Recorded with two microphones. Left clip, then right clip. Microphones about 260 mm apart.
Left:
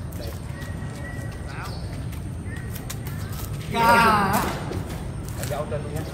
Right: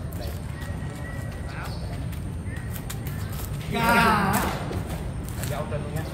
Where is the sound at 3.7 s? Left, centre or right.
Centre.